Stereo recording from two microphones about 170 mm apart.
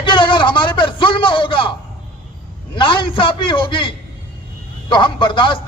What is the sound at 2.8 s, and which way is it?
A man's voice, 30° left (ahead or behind).